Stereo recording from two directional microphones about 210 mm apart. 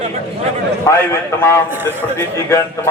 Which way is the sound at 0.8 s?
15° left (ahead or behind).